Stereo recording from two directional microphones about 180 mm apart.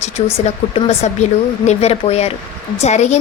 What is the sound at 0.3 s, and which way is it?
A woman's voice, 35° left (ahead or behind).